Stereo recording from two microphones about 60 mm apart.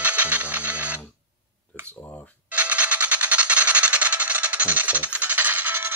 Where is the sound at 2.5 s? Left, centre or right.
Right.